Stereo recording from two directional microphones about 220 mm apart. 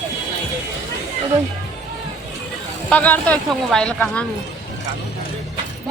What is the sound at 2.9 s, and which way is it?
Speech, 5° left (ahead or behind).